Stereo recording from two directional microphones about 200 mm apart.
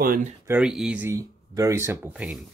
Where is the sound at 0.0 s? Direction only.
45° right (ahead or behind).